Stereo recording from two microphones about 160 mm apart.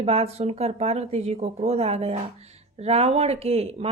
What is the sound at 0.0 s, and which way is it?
Speech, 40° right (ahead or behind).